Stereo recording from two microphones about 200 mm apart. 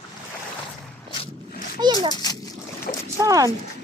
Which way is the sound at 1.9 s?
20° left (ahead or behind).